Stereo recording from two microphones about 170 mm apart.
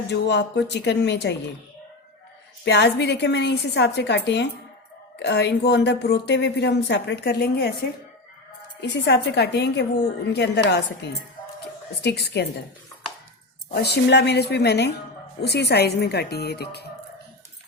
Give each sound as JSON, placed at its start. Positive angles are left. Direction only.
{"t": 0.1, "sound": "a woman's voice", "side_deg": 90}
{"t": 2.6, "sound": "a woman's voice", "side_deg": 90}
{"t": 8.8, "sound": "a woman's voice", "side_deg": 80}
{"t": 13.7, "sound": "a woman's voice", "side_deg": 75}